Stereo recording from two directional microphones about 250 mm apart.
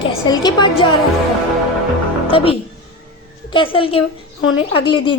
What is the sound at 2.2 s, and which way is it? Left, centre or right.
A woman's voice, left.